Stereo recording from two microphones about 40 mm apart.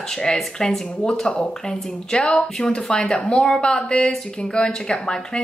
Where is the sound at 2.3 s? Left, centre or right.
Left.